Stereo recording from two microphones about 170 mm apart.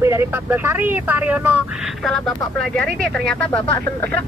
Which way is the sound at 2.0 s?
Centre (ahead or behind).